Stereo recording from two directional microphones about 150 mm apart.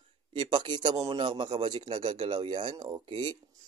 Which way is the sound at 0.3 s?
30° right (ahead or behind).